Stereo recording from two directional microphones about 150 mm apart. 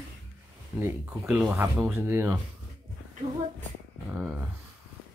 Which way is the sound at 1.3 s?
15° right (ahead or behind).